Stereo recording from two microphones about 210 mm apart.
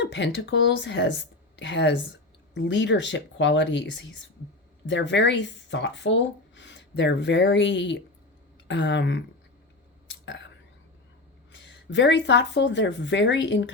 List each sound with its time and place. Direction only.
0.0 s speech: 55° left (ahead or behind)
10.1 s whispering: 60° left (ahead or behind)
11.5 s speech: 55° left (ahead or behind)